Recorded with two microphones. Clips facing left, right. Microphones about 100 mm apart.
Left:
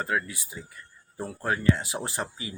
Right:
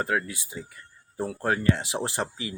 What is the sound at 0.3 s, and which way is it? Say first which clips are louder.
Speech: right 3 dB; 90° right.